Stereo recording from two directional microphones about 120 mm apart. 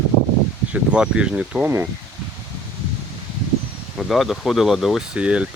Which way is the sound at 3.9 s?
Centre (ahead or behind).